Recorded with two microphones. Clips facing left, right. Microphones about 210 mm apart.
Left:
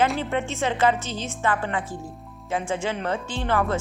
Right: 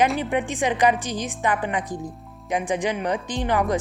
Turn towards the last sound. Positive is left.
turn(degrees=-15)  # may be behind; listen again after turning